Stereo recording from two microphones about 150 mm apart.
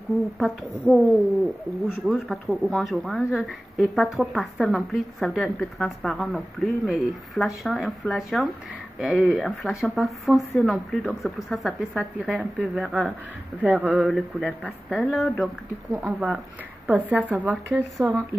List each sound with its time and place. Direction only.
0.4 s a woman's voice: 5° right (ahead or behind)
2.0 s a woman's voice: centre (ahead or behind)